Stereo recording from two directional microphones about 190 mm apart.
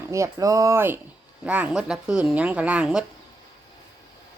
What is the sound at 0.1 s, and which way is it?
Speech, 15° right (ahead or behind).